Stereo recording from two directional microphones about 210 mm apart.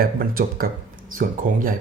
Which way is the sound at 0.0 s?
45° right (ahead or behind).